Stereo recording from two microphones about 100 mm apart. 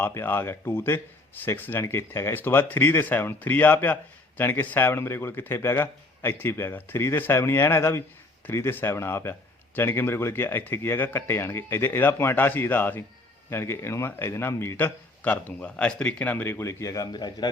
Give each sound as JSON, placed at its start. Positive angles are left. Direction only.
{"t": 0.0, "sound": "a man's voice", "side_deg": 25}